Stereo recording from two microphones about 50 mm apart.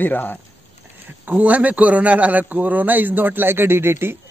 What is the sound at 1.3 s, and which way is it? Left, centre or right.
A man's voice, right.